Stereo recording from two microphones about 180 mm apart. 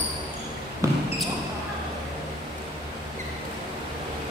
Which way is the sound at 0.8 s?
15° right (ahead or behind).